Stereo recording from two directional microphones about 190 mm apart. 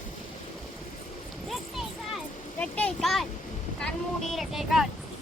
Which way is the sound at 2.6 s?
5° left (ahead or behind).